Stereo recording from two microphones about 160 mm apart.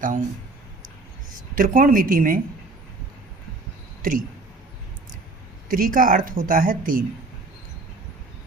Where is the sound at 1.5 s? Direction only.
55° right (ahead or behind).